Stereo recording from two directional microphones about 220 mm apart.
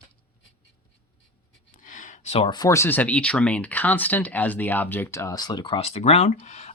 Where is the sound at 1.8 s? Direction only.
35° left (ahead or behind).